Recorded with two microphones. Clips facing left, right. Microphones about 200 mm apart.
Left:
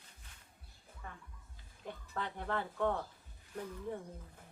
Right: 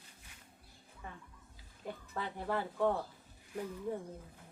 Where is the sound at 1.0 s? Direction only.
15° right (ahead or behind).